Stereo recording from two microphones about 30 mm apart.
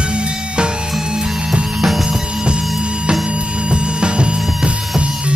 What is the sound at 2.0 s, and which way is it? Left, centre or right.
Music, right.